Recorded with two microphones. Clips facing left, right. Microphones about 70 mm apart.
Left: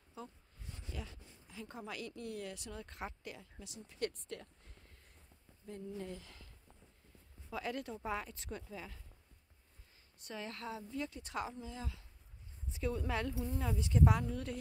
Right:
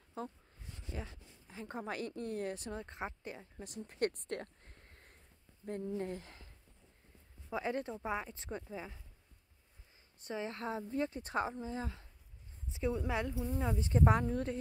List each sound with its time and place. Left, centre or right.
0.2 s speech: right
0.9 s speech: right
3.6 s speech: right
10.2 s speech: right
12.7 s speech: centre
13.3 s speech: centre
13.6 s speech: right
13.8 s speech: right